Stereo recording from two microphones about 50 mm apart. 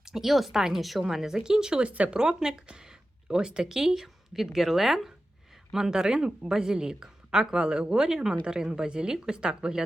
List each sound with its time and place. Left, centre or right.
0.0 s a woman's voice: centre
1.8 s speech: right
2.1 s a woman's voice: centre